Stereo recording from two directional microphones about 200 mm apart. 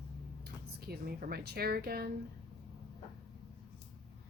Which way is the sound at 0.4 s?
50° right (ahead or behind).